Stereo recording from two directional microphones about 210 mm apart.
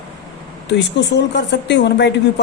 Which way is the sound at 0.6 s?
55° left (ahead or behind).